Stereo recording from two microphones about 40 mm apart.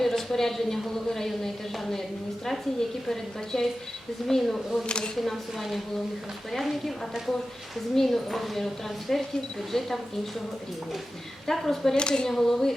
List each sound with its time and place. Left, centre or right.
0.0 s a woman's voice: centre
3.1 s a woman's voice: centre
4.9 s speech: left
5.1 s a woman's voice: centre
11.4 s a woman's voice: centre
11.9 s a woman's voice: centre